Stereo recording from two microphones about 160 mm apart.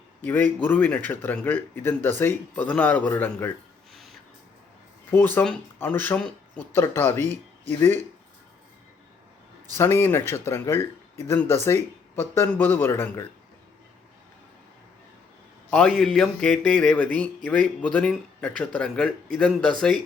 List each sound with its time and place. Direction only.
0.2 s speech: 10° left (ahead or behind)
5.1 s speech: 10° left (ahead or behind)
9.7 s speech: 15° left (ahead or behind)
15.7 s a man's voice: 5° left (ahead or behind)